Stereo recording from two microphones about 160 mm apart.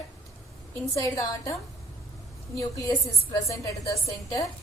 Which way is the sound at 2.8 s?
20° left (ahead or behind).